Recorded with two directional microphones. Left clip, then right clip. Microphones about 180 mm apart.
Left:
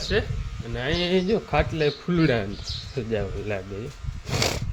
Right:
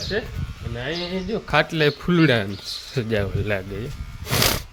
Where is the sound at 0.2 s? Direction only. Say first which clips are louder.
Left 1 dB; 15° left (ahead or behind).